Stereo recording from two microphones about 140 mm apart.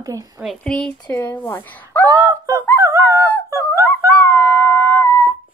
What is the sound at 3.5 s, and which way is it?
Dog, 15° left (ahead or behind).